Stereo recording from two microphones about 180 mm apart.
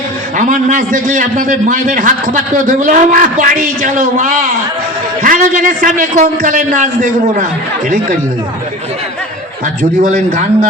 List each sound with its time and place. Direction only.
0.3 s a man's voice: 45° right (ahead or behind)
10.0 s a man's voice: 45° right (ahead or behind)